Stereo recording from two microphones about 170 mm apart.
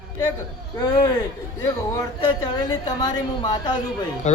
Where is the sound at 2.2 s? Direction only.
25° left (ahead or behind).